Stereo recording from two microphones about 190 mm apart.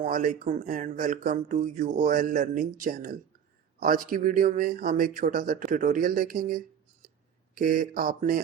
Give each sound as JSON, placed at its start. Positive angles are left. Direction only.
{"t": 0.0, "sound": "speech", "side_deg": -45}